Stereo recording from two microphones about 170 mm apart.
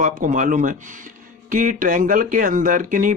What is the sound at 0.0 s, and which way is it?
Speech, 50° right (ahead or behind).